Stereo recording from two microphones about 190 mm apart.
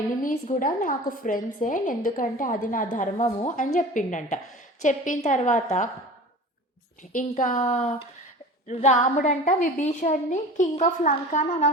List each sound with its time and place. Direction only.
0.2 s a woman's voice: 45° left (ahead or behind)
7.1 s a woman's voice: 40° left (ahead or behind)